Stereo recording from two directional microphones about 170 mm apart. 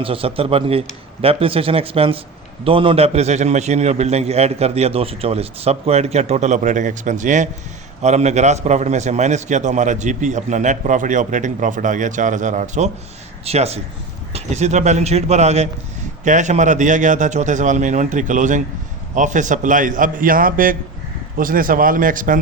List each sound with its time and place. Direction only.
0.0 s a man's voice: 35° right (ahead or behind); by 22.4 s 50° right (ahead or behind)